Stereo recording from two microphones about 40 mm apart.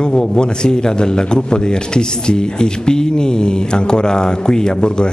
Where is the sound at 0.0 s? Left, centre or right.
Left.